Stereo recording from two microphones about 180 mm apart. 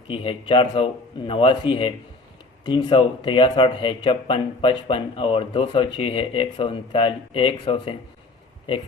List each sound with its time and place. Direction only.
0.1 s a man's voice: 30° left (ahead or behind)